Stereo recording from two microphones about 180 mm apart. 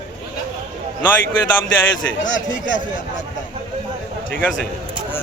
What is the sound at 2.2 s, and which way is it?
Speech, 45° left (ahead or behind).